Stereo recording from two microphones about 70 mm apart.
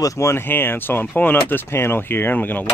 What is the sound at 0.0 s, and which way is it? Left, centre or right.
Speech, left.